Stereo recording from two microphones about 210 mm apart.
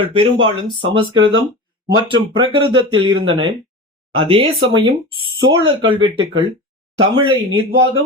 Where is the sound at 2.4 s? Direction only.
25° right (ahead or behind).